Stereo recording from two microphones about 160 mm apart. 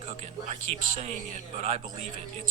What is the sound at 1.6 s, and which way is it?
Speech, 45° right (ahead or behind).